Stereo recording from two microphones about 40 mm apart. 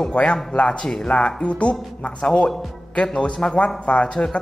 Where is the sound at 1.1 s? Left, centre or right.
Left.